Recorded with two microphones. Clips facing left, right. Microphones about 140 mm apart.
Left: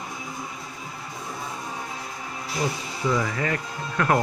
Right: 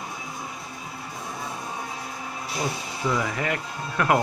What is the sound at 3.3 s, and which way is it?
Speech, 15° right (ahead or behind).